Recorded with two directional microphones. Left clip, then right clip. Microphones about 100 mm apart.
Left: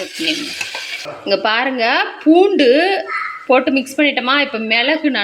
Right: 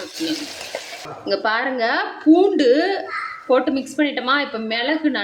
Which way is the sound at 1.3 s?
30° left (ahead or behind).